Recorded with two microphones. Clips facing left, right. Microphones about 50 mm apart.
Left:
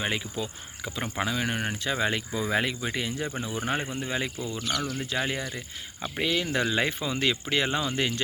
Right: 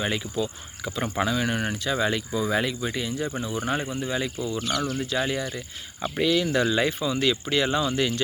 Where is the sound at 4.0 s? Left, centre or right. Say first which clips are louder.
Right 3 dB; left.